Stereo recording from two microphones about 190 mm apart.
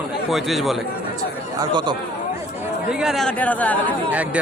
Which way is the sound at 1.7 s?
25° right (ahead or behind).